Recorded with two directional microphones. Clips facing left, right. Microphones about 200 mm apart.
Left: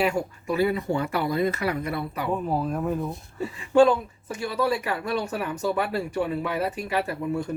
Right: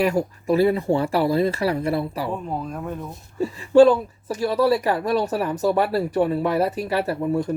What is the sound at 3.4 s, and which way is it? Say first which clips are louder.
A woman's voice: right 5 dB; 35° right (ahead or behind).